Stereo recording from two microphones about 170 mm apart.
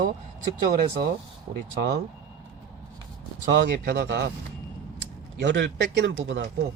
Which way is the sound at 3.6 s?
60° right (ahead or behind).